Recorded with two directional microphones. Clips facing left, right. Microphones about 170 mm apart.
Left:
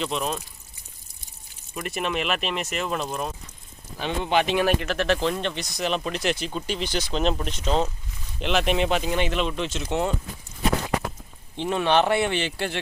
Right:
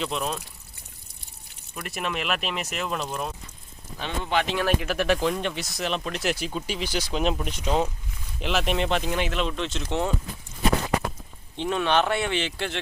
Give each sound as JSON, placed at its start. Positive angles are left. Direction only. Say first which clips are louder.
{"t": 0.0, "sound": "speech", "louder": "left 1 dB", "side_deg": 0}
{"t": 1.7, "sound": "speech", "louder": "left 3 dB", "side_deg": 0}
{"t": 4.2, "sound": "speech", "louder": "left 3 dB", "side_deg": 20}
{"t": 4.8, "sound": "speech", "louder": "even", "side_deg": -10}
{"t": 11.5, "sound": "speech", "louder": "left 2 dB", "side_deg": 10}